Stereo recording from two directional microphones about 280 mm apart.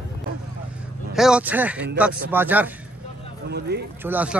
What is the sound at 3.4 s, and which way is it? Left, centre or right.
Speech, right.